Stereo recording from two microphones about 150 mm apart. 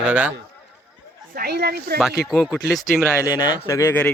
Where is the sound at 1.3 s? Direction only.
85° right.